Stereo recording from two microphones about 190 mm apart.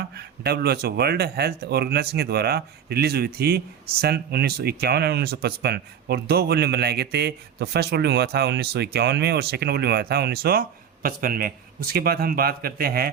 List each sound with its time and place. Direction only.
0.1 s speech: 55° right (ahead or behind)